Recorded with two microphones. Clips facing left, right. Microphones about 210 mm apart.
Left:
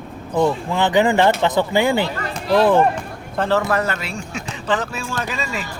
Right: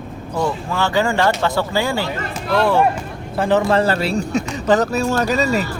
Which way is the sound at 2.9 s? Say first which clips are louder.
Right 1 dB; 10° right (ahead or behind).